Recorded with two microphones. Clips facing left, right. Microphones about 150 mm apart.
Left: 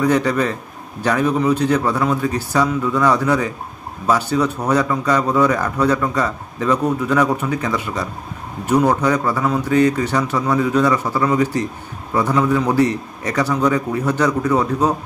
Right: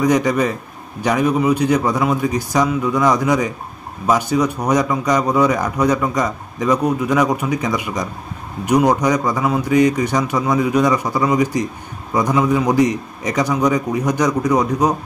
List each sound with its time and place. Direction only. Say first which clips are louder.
0.0 s speech: right 1 dB; 15° right (ahead or behind)